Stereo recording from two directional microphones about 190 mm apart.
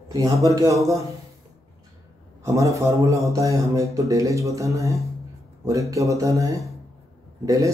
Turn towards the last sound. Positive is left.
turn(degrees=-15)  # may be behind; listen again after turning